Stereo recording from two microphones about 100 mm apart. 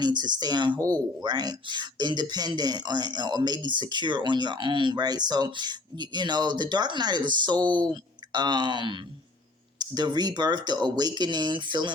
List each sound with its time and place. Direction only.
0.0 s speech: 45° right (ahead or behind)